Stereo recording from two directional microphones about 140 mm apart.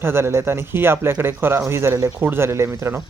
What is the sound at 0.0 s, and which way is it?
Speech, 15° right (ahead or behind).